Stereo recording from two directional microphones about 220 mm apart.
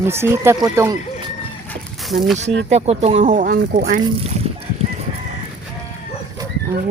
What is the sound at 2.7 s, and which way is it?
Speech, 30° right (ahead or behind).